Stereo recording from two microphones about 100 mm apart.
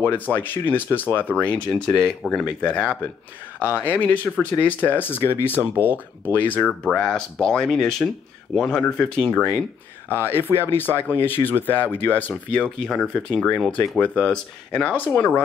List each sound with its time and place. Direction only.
0.0 s speech: 20° left (ahead or behind)
5.6 s speech: 20° right (ahead or behind)
6.3 s speech: 20° left (ahead or behind)
9.3 s speech: 20° left (ahead or behind)
10.0 s speech: 20° right (ahead or behind)
11.2 s speech: 20° left (ahead or behind)